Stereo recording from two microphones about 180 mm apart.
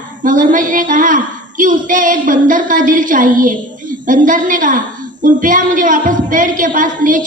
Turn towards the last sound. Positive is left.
turn(degrees=-45)  # may be behind; listen again after turning